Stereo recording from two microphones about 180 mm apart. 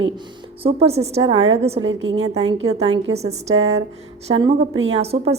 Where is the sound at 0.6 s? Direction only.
35° right (ahead or behind).